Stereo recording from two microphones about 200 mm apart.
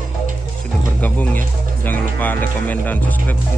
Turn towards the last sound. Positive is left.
turn(degrees=10)  # may be behind; listen again after turning